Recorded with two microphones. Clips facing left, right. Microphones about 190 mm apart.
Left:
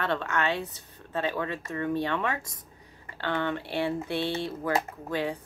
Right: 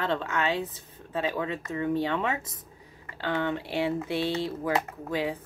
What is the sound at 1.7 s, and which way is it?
Speech, 20° right (ahead or behind).